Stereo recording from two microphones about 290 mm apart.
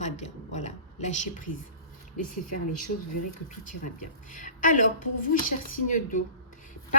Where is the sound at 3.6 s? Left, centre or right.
Left.